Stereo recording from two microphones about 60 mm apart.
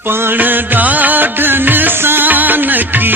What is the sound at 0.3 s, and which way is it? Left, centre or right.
Music, right.